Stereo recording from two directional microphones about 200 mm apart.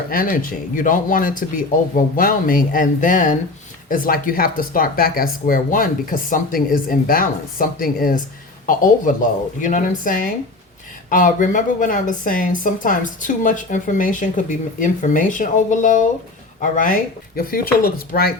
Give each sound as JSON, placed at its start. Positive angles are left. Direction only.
{"t": 0.1, "sound": "a woman's voice", "side_deg": 45}